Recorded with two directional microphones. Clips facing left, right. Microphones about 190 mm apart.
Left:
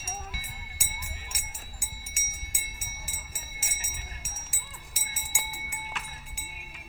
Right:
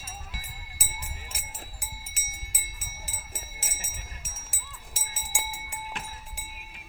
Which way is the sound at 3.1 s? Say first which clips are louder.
Right 3 dB; 55° right (ahead or behind).